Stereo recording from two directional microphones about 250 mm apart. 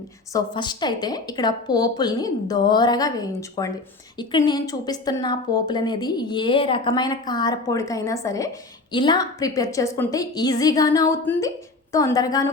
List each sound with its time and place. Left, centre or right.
0.3 s speech: centre